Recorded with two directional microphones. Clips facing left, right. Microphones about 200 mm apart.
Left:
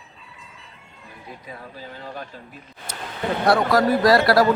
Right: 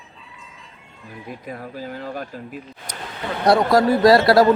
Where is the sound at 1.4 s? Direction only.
50° right (ahead or behind).